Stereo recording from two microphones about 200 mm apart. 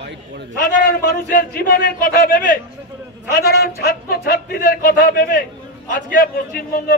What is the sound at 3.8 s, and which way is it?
A man's voice, 50° left (ahead or behind).